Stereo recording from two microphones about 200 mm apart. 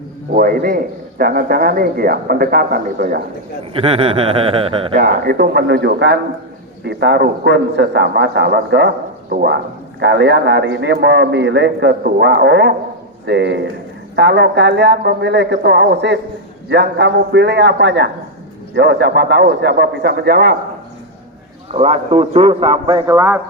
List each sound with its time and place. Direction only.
0.3 s speech: 45° right (ahead or behind)
3.7 s a man's voice: 30° right (ahead or behind)
4.9 s a man's voice: 50° right (ahead or behind)
21.7 s a man's voice: 35° right (ahead or behind); by 23.4 s 15° right (ahead or behind)